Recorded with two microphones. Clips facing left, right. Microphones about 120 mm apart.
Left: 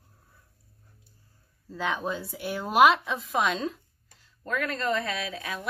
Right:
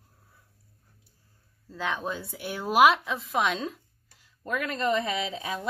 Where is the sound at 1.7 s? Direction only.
Centre (ahead or behind).